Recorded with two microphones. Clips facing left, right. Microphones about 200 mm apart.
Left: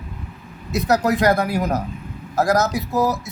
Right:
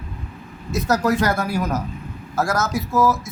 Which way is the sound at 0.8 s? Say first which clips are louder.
Left 2 dB; 35° left (ahead or behind).